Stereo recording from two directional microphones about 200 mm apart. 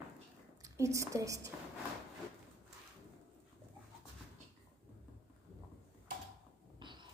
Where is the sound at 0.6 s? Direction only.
15° right (ahead or behind).